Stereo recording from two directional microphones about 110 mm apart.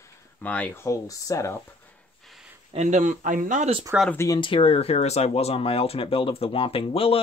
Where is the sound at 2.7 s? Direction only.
90° right.